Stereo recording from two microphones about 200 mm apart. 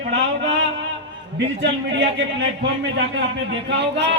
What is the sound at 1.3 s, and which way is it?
A man's voice, 60° right (ahead or behind).